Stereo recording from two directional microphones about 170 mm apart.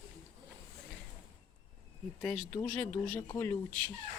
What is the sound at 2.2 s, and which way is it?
Speech, 5° left (ahead or behind).